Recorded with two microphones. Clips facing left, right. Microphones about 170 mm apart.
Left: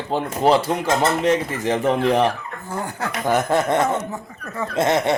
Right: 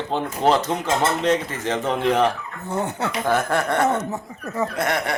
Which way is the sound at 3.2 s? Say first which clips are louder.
Left 3 dB; 15° left (ahead or behind).